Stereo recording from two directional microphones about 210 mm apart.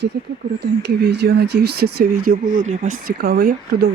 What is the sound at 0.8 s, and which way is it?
Speech, 55° right (ahead or behind).